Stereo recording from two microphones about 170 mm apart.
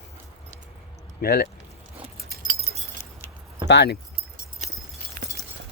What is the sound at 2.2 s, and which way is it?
Keys jangling, 65° right (ahead or behind).